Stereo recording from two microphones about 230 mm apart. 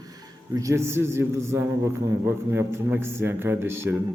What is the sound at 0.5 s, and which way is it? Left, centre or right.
A man's voice, centre.